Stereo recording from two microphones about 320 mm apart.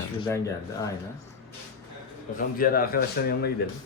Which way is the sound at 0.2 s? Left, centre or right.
Centre.